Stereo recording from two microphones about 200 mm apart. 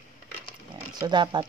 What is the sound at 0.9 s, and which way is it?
Speech, 20° right (ahead or behind).